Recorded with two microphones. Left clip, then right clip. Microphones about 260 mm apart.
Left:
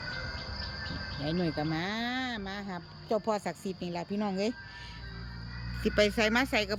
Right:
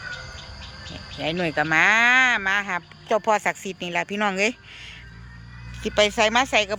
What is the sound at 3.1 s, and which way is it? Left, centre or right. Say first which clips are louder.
Speech: right 10 dB; centre.